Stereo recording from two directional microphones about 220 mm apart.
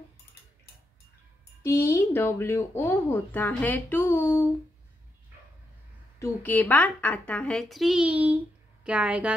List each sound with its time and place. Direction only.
1.6 s speech: 15° left (ahead or behind)
6.1 s a woman's voice: 10° left (ahead or behind); by 9.3 s 5° right (ahead or behind)